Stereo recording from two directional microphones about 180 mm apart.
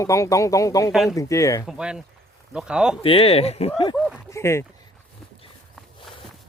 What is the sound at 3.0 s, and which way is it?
Speech, 30° left (ahead or behind).